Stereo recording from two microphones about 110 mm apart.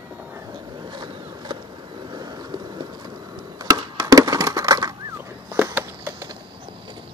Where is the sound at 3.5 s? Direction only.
35° right (ahead or behind); by 6.2 s 20° right (ahead or behind).